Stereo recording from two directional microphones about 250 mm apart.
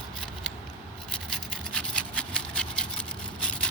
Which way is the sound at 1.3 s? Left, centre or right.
Centre.